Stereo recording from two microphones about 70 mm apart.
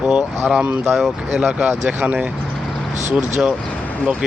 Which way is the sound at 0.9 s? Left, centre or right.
Centre.